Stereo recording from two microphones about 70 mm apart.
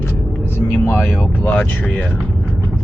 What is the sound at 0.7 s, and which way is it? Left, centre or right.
Speech, left.